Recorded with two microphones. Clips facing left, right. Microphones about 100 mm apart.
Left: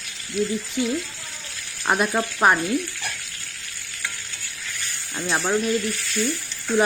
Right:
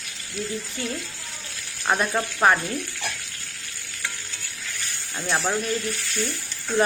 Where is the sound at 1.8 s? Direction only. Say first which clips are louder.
Left 2 dB; 10° left (ahead or behind).